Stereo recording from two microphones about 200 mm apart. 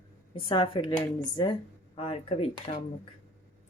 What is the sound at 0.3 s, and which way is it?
Dishes, 25° left (ahead or behind).